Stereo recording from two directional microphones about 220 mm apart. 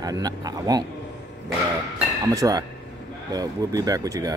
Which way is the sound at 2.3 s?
15° right (ahead or behind).